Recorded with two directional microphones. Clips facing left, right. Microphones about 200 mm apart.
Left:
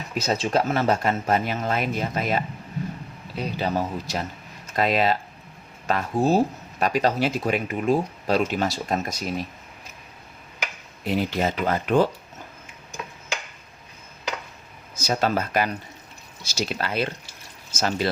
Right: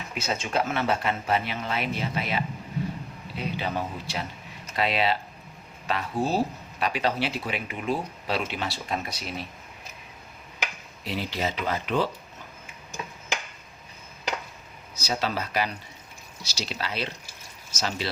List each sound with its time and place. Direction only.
0.1 s a man's voice: 40° left (ahead or behind)
11.0 s speech: 50° left (ahead or behind)
14.9 s speech: 50° left (ahead or behind)